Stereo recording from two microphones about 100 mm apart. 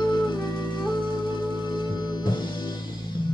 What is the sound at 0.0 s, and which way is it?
Music, 45° left (ahead or behind).